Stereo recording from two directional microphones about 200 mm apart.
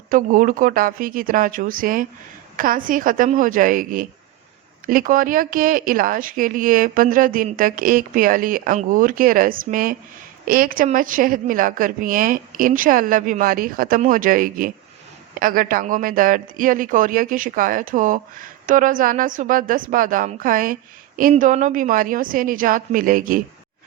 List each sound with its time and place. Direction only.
0.1 s speech: 40° right (ahead or behind)